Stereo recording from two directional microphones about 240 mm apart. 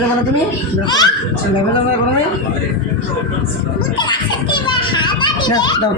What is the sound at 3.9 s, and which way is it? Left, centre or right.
A child's voice, centre.